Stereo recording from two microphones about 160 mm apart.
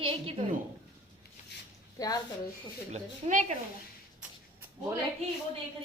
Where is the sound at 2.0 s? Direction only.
20° left (ahead or behind).